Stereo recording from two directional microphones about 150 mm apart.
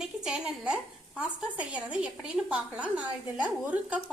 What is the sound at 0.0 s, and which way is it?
A woman's voice, 5° right (ahead or behind).